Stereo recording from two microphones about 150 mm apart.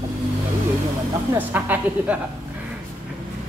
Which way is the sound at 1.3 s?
10° right (ahead or behind).